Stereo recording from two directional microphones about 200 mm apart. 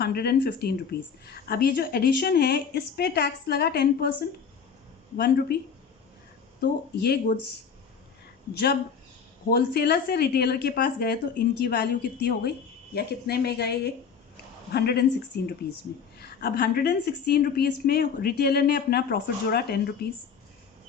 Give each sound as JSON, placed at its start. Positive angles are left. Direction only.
{"t": 0.0, "sound": "a woman's voice", "side_deg": 50}
{"t": 5.1, "sound": "a woman's voice", "side_deg": 50}
{"t": 6.6, "sound": "a woman's voice", "side_deg": 50}
{"t": 8.5, "sound": "a woman's voice", "side_deg": 55}
{"t": 16.1, "sound": "a woman's voice", "side_deg": 50}